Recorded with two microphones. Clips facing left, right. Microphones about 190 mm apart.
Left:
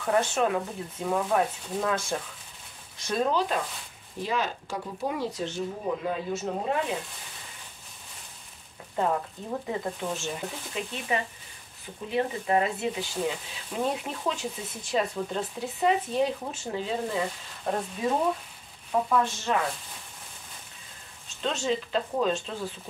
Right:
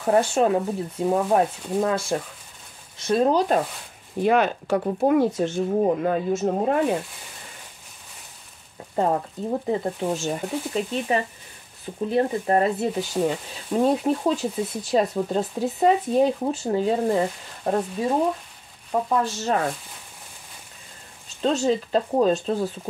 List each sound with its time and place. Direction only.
0.0 s speech: 35° right (ahead or behind)
3.1 s speech: 35° right (ahead or behind)
4.2 s speech: 60° right (ahead or behind)
8.9 s speech: 40° right (ahead or behind)
18.9 s speech: 40° right (ahead or behind)
21.4 s speech: 40° right (ahead or behind)